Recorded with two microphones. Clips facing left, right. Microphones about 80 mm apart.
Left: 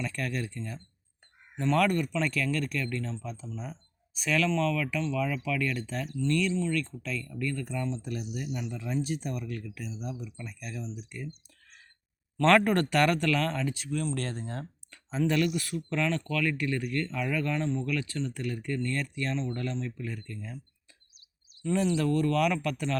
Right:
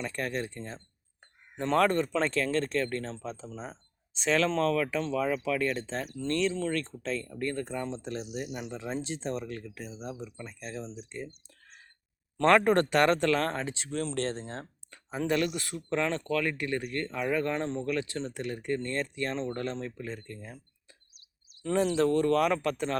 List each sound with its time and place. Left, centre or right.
0.0 s speech: right
4.4 s speech: right
8.4 s speech: right
8.7 s speech: right
12.4 s speech: right
13.5 s speech: right
20.1 s speech: right
21.9 s speech: right